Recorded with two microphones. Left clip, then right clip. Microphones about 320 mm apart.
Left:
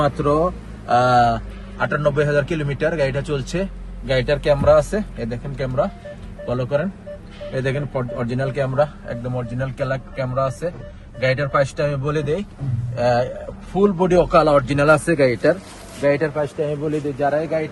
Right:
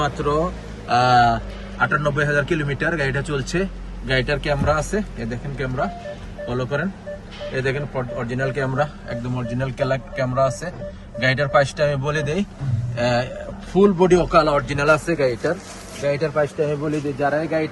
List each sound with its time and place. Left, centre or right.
0.0 s a man's voice: centre
16.4 s speech: centre